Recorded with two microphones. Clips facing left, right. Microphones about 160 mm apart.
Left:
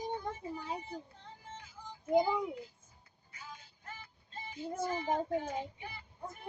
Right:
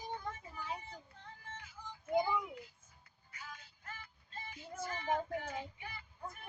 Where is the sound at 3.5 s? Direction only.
25° left (ahead or behind).